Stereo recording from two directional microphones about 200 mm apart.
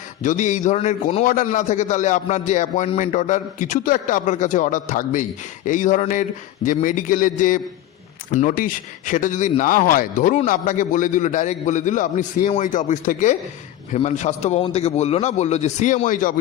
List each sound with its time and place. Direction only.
0.2 s a man's voice: 40° left (ahead or behind)